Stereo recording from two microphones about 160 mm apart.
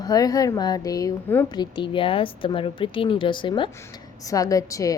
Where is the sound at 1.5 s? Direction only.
30° left (ahead or behind).